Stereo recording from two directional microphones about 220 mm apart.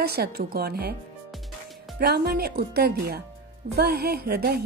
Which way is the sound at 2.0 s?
45° right (ahead or behind).